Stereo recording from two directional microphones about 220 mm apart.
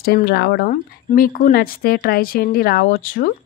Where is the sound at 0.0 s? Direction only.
45° left (ahead or behind).